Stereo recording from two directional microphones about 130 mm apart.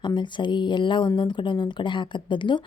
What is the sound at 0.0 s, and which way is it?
A woman's voice, 35° left (ahead or behind).